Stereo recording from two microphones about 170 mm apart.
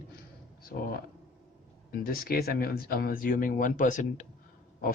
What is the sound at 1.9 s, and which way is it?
Speech, 60° left (ahead or behind).